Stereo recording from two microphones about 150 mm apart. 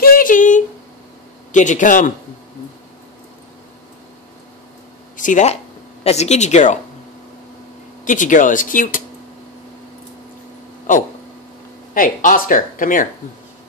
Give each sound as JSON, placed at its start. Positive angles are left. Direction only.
{"t": 0.0, "sound": "a sound", "side_deg": 70}
{"t": 1.5, "sound": "speech", "side_deg": 55}
{"t": 5.1, "sound": "speech", "side_deg": 60}
{"t": 8.0, "sound": "speech", "side_deg": 60}
{"t": 11.9, "sound": "speech", "side_deg": 65}